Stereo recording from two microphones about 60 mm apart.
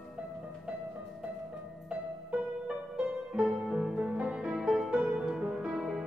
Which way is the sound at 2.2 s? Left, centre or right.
Centre.